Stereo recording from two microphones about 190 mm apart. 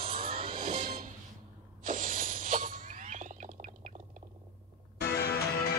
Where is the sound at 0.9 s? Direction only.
50° right (ahead or behind).